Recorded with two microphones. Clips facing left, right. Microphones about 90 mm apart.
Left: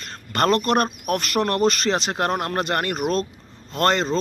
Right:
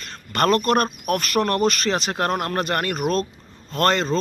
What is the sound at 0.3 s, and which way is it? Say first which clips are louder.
Speech: right 1 dB; 25° left (ahead or behind).